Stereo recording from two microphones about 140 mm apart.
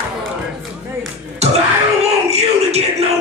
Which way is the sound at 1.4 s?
50° right (ahead or behind).